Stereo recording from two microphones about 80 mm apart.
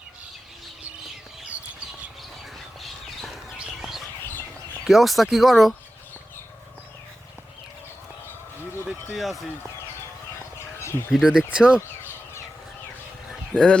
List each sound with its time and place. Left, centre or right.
2.8 s a sound: centre
3.6 s bird: centre
4.9 s speech: centre
8.7 s a sound: left
9.1 s speech: centre
11.1 s speech: centre
13.5 s speech: centre